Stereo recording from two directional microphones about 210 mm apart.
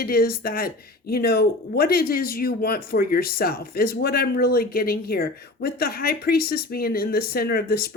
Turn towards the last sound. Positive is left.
turn(degrees=45)  # may be behind; listen again after turning